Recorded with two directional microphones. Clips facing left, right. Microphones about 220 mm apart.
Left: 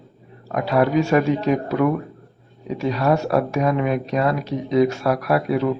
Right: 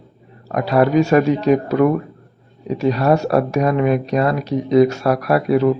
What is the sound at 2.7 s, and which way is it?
Speech, 40° right (ahead or behind).